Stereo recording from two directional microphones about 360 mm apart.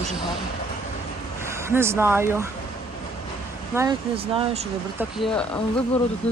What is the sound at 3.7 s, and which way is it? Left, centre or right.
Speech, centre.